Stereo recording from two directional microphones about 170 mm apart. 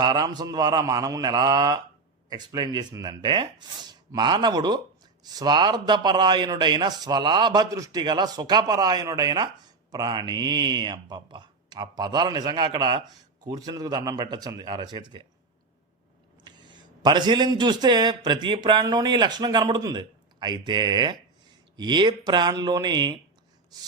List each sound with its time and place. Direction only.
0.0 s speech: 25° right (ahead or behind)
16.4 s a man's voice: 25° right (ahead or behind)